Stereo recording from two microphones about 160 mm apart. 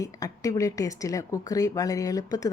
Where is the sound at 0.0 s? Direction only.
20° left (ahead or behind).